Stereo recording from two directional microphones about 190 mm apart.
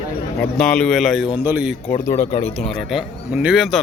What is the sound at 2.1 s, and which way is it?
Speech, 40° left (ahead or behind).